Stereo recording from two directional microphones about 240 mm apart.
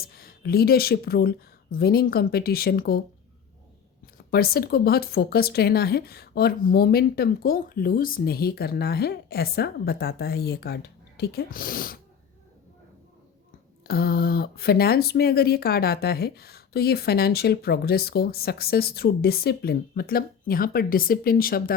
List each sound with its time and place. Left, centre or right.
0.0 s speech: left
4.0 s speech: left
13.8 s speech: left